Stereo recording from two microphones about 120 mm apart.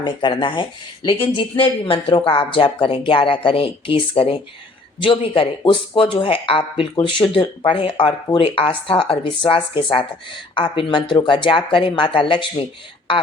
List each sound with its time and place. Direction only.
0.0 s speech: 40° left (ahead or behind)